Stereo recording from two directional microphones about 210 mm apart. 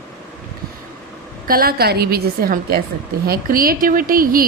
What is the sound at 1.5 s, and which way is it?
A woman's voice, 45° right (ahead or behind).